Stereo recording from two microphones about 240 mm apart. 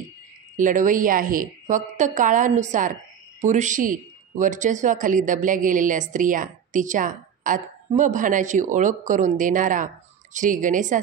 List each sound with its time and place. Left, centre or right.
0.6 s a man's voice: right